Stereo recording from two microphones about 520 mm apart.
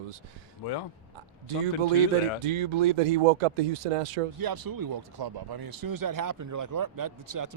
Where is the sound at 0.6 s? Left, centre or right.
Left.